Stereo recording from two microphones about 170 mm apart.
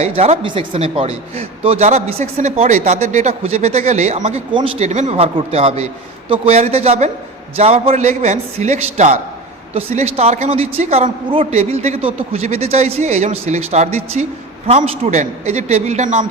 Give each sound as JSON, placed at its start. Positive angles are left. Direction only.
{"t": 0.0, "sound": "speech", "side_deg": -40}